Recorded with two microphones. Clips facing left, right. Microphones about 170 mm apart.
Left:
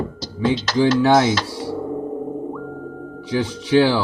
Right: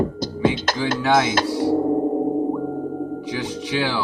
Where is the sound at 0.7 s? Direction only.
50° right (ahead or behind).